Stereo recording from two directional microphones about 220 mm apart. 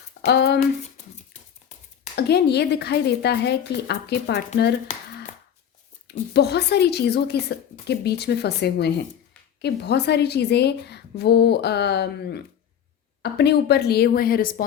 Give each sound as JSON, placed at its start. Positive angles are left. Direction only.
{"t": 0.3, "sound": "a woman's voice", "side_deg": 50}
{"t": 2.1, "sound": "a woman's voice", "side_deg": 50}
{"t": 6.1, "sound": "a woman's voice", "side_deg": 50}